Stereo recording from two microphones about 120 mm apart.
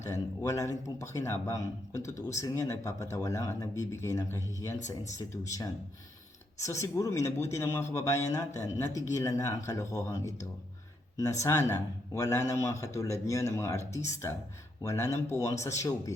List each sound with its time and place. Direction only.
0.0 s a man's voice: 25° left (ahead or behind)